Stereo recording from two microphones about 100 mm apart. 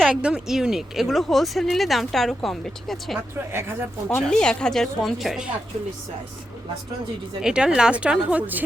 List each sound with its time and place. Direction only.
0.0 s speech: 10° right (ahead or behind)
3.5 s speech: 25° right (ahead or behind)
4.3 s speech: 10° left (ahead or behind)
7.4 s a woman's voice: 10° right (ahead or behind)